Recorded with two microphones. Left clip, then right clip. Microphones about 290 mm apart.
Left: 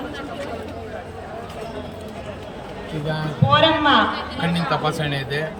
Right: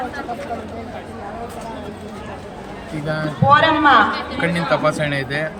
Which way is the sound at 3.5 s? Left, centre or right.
Centre.